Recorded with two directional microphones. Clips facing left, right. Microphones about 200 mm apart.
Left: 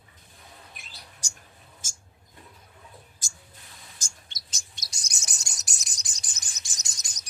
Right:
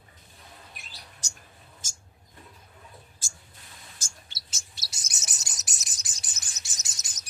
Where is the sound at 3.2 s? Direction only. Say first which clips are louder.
Even; 15° left (ahead or behind).